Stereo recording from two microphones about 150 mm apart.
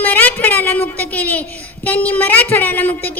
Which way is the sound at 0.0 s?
10° left (ahead or behind).